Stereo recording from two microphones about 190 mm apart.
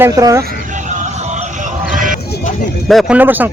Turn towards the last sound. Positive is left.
turn(degrees=-10)  # may be behind; listen again after turning